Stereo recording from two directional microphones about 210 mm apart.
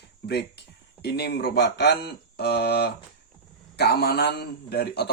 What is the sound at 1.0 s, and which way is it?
Speech, 50° left (ahead or behind).